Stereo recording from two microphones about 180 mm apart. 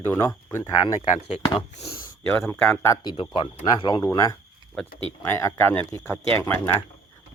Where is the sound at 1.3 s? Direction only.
35° left (ahead or behind).